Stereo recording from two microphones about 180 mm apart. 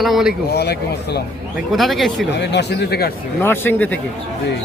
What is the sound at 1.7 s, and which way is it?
Speech, centre (ahead or behind).